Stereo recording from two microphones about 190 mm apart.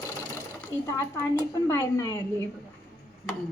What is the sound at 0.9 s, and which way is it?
Speech, 15° left (ahead or behind).